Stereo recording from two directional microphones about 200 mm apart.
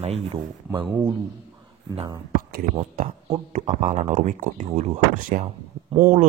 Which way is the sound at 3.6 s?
35° right (ahead or behind).